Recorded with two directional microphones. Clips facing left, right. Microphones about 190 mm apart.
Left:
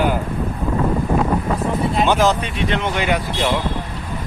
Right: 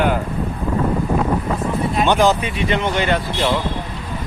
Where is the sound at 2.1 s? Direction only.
Centre (ahead or behind).